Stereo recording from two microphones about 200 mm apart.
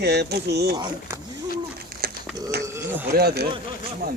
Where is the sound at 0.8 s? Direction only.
15° right (ahead or behind).